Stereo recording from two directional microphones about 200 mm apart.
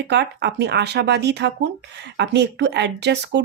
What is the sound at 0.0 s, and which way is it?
Speech, 55° right (ahead or behind).